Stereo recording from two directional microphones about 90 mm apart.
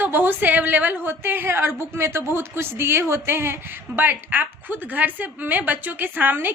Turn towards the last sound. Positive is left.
turn(degrees=-20)  # may be behind; listen again after turning